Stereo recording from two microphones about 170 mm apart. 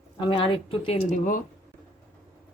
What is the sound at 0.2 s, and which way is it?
Speech, 30° left (ahead or behind).